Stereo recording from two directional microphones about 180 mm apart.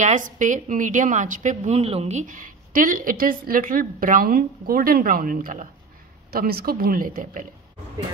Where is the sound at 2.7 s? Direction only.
50° right (ahead or behind).